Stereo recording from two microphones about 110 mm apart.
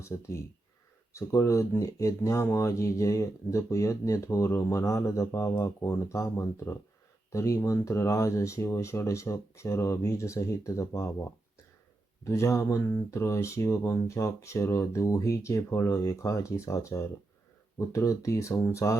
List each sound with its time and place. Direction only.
0.0 s speech: 25° left (ahead or behind)